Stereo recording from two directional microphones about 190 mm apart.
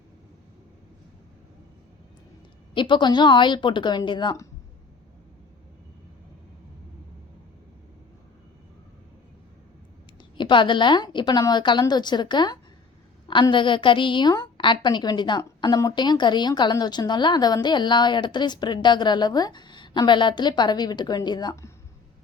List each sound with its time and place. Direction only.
2.7 s a woman's voice: 25° left (ahead or behind)
10.3 s a woman's voice: 25° left (ahead or behind)